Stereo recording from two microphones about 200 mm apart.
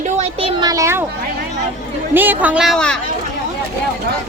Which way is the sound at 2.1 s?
10° right (ahead or behind).